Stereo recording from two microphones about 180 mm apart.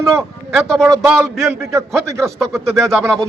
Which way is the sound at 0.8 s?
10° right (ahead or behind).